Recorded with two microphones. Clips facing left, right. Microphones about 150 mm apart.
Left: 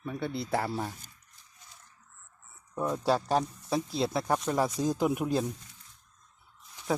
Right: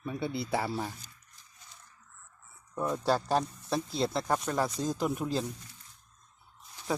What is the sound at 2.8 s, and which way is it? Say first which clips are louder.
Speech: left 1 dB; centre (ahead or behind).